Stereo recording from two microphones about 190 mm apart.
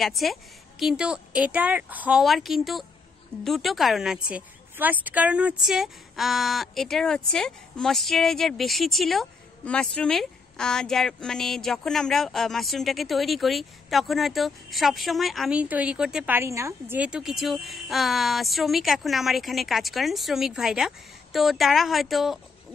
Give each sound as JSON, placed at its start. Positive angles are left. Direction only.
{"t": 0.0, "sound": "a woman's voice", "side_deg": 0}